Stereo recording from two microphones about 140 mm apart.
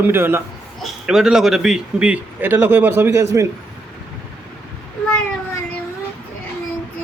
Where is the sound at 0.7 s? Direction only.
Centre (ahead or behind); by 3.5 s 20° right (ahead or behind).